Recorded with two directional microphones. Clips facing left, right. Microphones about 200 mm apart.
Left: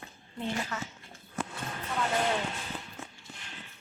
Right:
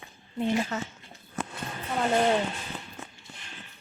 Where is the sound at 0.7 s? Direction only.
35° right (ahead or behind).